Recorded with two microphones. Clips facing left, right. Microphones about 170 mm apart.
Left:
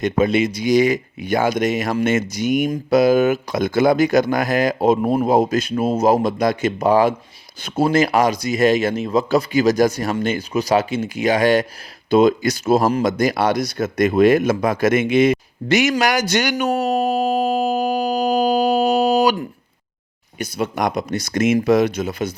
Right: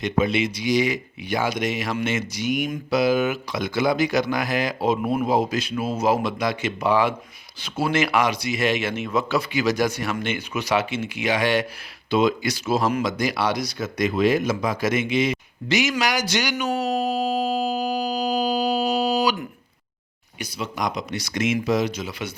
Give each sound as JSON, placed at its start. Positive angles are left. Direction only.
{"t": 0.0, "sound": "speech", "side_deg": 45}
{"t": 20.4, "sound": "speech", "side_deg": 55}